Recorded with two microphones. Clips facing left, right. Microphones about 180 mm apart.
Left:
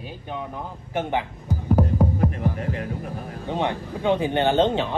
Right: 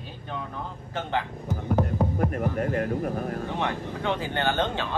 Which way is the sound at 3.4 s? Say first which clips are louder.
Left 3 dB; 20° left (ahead or behind).